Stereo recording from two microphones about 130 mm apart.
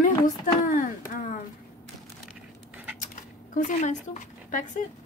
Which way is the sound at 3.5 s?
75° left (ahead or behind).